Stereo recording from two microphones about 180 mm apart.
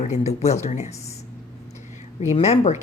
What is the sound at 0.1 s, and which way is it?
Speech, 40° left (ahead or behind).